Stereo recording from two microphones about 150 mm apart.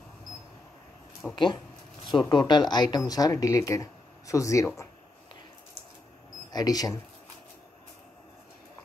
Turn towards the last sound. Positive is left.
turn(degrees=25)  # may be behind; listen again after turning